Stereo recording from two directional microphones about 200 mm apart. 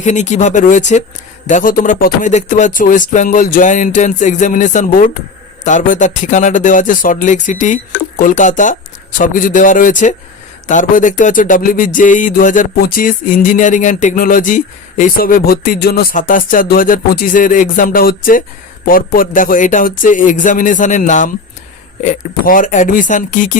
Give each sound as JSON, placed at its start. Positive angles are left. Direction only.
{"t": 0.0, "sound": "speech", "side_deg": 35}
{"t": 11.9, "sound": "music", "side_deg": 40}
{"t": 18.9, "sound": "speech", "side_deg": 45}